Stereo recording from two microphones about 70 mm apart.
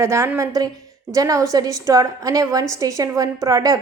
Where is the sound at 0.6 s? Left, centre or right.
Right.